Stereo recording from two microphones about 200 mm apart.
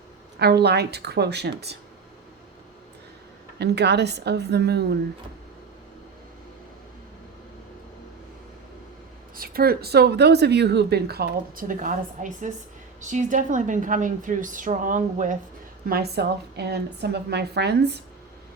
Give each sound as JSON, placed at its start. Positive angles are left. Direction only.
{"t": 0.3, "sound": "a woman's voice", "side_deg": -55}
{"t": 3.6, "sound": "a woman's voice", "side_deg": -55}
{"t": 9.3, "sound": "a woman's voice", "side_deg": -45}
{"t": 15.9, "sound": "a woman's voice", "side_deg": -50}